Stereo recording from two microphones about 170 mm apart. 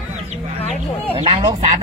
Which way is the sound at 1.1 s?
35° right (ahead or behind).